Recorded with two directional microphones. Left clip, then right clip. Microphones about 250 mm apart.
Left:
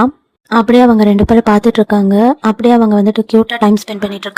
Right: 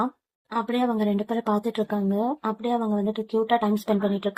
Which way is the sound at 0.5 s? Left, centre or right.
Left.